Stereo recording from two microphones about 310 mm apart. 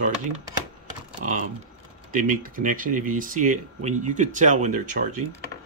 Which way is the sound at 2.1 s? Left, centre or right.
Right.